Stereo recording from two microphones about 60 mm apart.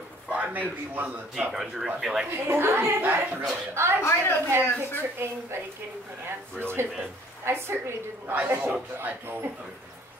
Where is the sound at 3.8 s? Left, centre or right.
Right.